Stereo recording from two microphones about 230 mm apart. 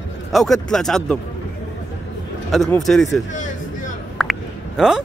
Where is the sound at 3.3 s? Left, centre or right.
Left.